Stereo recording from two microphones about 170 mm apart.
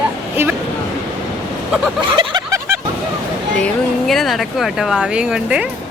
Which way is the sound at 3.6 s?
Centre (ahead or behind).